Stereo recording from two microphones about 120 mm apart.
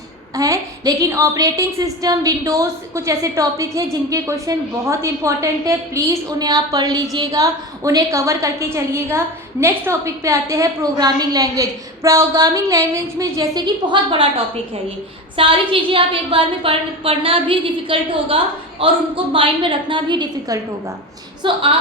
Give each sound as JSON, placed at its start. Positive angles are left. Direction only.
{"t": 0.3, "sound": "a woman's voice", "side_deg": -30}